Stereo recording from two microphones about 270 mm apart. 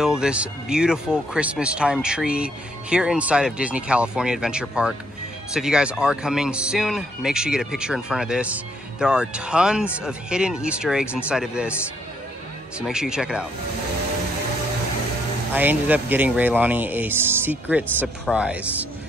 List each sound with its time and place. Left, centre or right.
0.0 s speech: centre
12.7 s speech: centre
15.5 s speech: centre